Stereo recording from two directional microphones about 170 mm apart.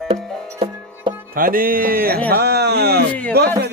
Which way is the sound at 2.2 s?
70° right (ahead or behind).